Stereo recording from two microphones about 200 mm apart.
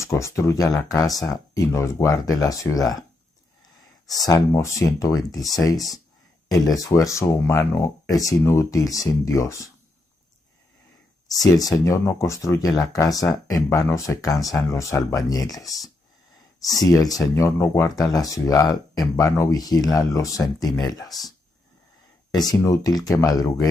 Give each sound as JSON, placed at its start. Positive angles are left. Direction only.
{"t": 0.0, "sound": "speech", "side_deg": 15}
{"t": 4.2, "sound": "speech", "side_deg": 20}
{"t": 11.4, "sound": "speech", "side_deg": 20}
{"t": 22.3, "sound": "speech", "side_deg": 20}